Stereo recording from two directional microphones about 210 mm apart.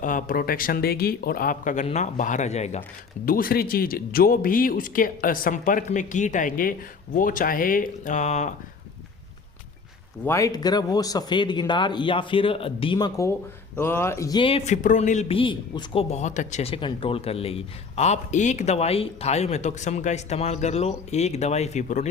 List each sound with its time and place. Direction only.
0.0 s a man's voice: 40° left (ahead or behind)
3.2 s a man's voice: 45° left (ahead or behind)
10.2 s a man's voice: 15° left (ahead or behind); by 22.0 s 35° left (ahead or behind)